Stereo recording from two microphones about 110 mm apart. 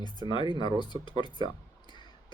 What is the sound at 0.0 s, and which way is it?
Speech, 40° left (ahead or behind).